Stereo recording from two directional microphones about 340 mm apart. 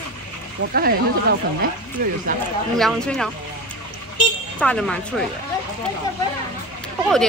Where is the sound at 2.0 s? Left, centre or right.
Right.